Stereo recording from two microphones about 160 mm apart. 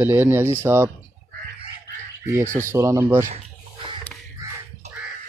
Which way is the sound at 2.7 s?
15° right (ahead or behind).